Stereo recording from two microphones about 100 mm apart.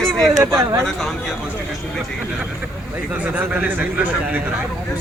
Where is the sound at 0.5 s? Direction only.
30° right (ahead or behind).